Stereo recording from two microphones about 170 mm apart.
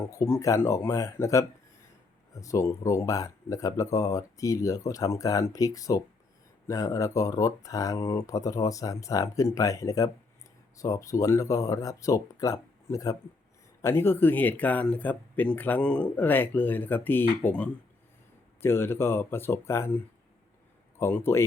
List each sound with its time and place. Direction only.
0.0 s speech: 15° left (ahead or behind)
21.0 s speech: 15° left (ahead or behind)